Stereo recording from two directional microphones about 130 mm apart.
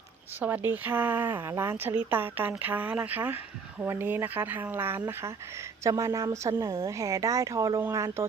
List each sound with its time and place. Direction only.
0.3 s a woman's voice: 15° right (ahead or behind)